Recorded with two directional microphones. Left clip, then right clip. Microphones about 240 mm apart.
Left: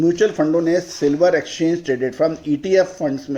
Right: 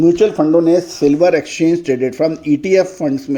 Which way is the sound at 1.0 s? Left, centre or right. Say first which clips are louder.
Right 3 dB; right.